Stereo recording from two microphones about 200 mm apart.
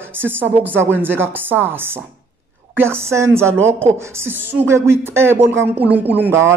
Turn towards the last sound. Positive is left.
turn(degrees=-10)  # may be behind; listen again after turning